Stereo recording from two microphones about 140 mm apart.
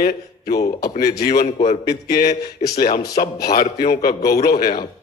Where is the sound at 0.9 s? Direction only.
90° left.